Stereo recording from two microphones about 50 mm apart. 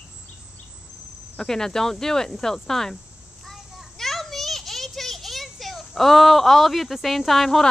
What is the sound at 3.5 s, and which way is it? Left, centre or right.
Children playing, centre.